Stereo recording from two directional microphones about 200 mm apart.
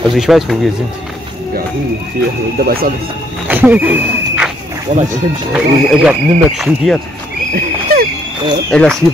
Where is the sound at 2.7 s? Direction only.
50° right (ahead or behind).